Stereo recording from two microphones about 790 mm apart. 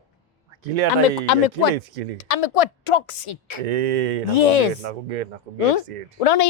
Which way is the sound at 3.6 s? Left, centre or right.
Right.